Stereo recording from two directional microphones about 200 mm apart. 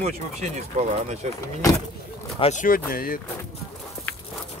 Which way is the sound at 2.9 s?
45° left (ahead or behind).